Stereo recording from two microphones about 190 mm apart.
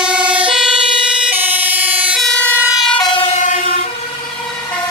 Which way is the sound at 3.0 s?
30° left (ahead or behind).